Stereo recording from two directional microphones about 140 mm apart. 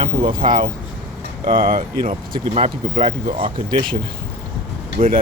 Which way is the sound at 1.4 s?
90° right.